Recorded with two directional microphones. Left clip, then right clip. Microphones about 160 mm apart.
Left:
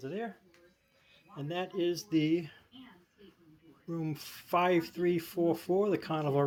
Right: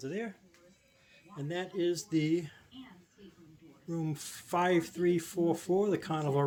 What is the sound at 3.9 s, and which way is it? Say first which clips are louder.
Speech: even; 10° right (ahead or behind).